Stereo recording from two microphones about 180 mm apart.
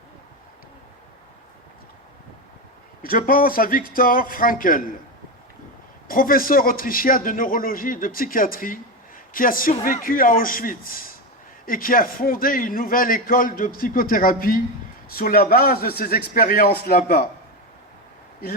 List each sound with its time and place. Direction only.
3.0 s a man's voice: 55° left (ahead or behind)
6.1 s a man's voice: 50° left (ahead or behind)